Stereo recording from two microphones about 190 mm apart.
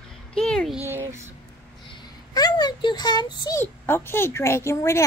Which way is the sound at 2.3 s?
20° left (ahead or behind).